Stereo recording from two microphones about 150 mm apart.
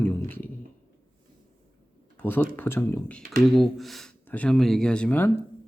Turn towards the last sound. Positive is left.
turn(degrees=10)  # may be behind; listen again after turning